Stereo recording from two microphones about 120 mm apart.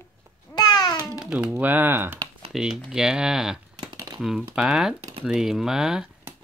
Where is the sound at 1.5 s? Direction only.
15° right (ahead or behind).